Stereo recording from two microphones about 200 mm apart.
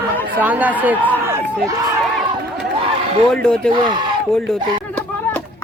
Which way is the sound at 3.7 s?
25° right (ahead or behind).